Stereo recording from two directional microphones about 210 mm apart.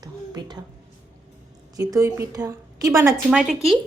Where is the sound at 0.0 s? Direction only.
20° right (ahead or behind).